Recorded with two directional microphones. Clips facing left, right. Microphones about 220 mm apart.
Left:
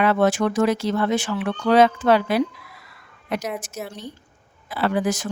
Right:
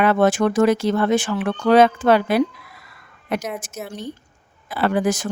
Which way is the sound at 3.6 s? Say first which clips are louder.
Right 2 dB; 50° right (ahead or behind).